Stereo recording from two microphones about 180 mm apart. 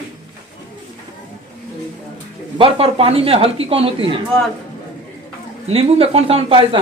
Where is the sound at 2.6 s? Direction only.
30° right (ahead or behind).